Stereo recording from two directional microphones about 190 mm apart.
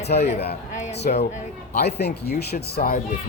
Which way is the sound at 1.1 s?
50° left (ahead or behind).